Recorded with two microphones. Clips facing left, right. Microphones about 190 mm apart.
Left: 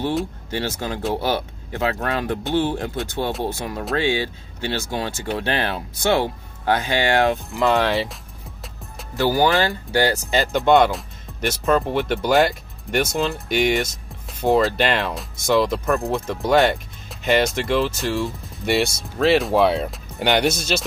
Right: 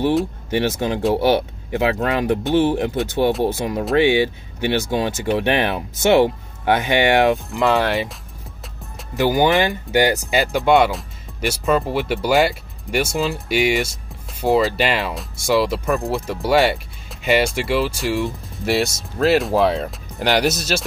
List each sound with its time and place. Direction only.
0.5 s speech: 15° right (ahead or behind)
9.1 s speech: 15° right (ahead or behind)
18.7 s speech: centre (ahead or behind)